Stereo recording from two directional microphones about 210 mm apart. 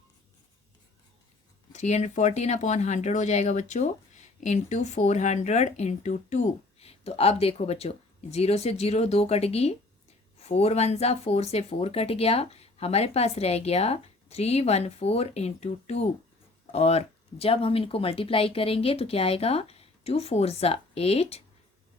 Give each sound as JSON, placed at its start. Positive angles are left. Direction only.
{"t": 1.7, "sound": "speech", "side_deg": 35}